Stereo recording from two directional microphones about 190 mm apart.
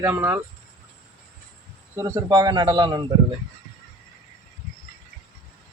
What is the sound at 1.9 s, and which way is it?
Speech, 15° right (ahead or behind).